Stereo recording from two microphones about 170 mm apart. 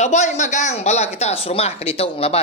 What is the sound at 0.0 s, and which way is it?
A woman's voice, 45° left (ahead or behind).